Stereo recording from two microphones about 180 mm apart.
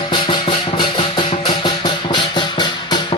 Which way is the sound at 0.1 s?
25° left (ahead or behind).